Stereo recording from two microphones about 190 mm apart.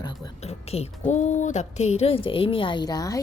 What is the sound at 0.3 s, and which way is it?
A woman's voice, 35° left (ahead or behind).